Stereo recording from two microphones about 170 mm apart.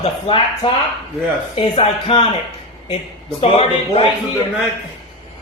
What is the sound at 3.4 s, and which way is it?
Speech, 35° left (ahead or behind).